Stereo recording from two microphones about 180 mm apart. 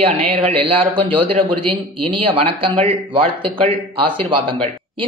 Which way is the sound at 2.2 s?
30° right (ahead or behind).